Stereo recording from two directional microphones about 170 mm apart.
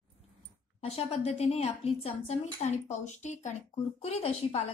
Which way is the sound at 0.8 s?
35° left (ahead or behind).